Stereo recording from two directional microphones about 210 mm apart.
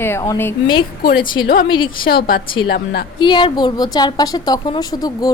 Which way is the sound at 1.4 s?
65° left (ahead or behind).